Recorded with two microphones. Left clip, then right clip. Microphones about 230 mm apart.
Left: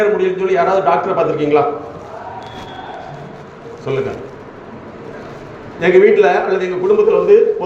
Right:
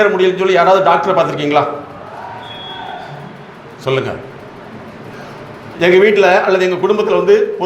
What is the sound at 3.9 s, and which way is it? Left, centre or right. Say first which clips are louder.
Speech: right 3 dB; right.